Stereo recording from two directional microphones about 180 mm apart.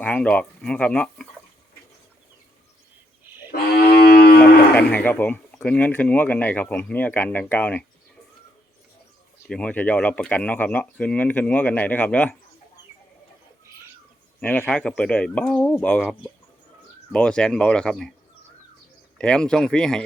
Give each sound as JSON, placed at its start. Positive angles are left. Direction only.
{"t": 0.0, "sound": "speech", "side_deg": 5}
{"t": 3.5, "sound": "cattle", "side_deg": 60}
{"t": 4.7, "sound": "speech", "side_deg": 10}
{"t": 9.5, "sound": "speech", "side_deg": 5}
{"t": 14.4, "sound": "speech", "side_deg": 10}
{"t": 17.1, "sound": "speech", "side_deg": 5}
{"t": 19.2, "sound": "speech", "side_deg": 5}